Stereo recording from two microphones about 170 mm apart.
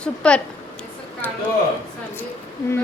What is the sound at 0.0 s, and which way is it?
Speech, 5° left (ahead or behind).